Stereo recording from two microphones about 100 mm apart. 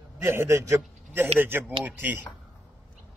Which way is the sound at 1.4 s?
20° right (ahead or behind).